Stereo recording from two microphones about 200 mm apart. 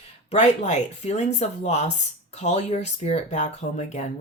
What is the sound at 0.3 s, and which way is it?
Speech, 35° left (ahead or behind).